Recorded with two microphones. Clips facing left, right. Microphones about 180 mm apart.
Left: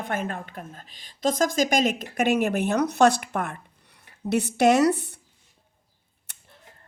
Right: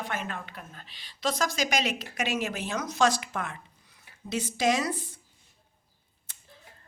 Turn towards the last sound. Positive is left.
turn(degrees=70)  # may be behind; listen again after turning